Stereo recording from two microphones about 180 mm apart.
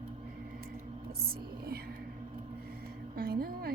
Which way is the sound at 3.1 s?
55° right (ahead or behind).